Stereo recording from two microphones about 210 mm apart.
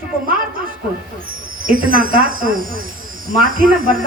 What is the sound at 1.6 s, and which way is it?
A woman's voice, 40° right (ahead or behind).